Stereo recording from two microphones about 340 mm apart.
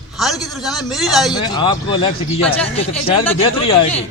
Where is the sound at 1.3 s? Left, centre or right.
Centre.